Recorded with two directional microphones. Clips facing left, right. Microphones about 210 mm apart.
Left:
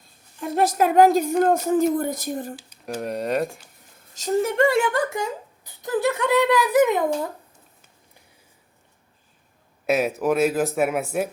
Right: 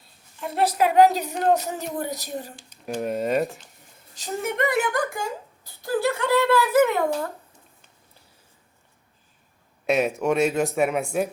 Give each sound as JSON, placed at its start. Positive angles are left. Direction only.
{"t": 0.0, "sound": "a woman's voice", "side_deg": 45}
{"t": 2.6, "sound": "speech", "side_deg": 5}
{"t": 4.1, "sound": "a woman's voice", "side_deg": 45}
{"t": 4.5, "sound": "speech", "side_deg": 30}
{"t": 9.8, "sound": "speech", "side_deg": 0}